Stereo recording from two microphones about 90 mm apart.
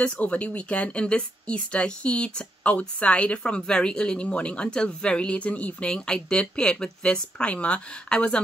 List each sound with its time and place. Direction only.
0.0 s speech: 15° left (ahead or behind)